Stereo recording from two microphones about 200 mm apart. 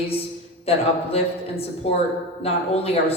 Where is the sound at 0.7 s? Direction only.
30° left (ahead or behind).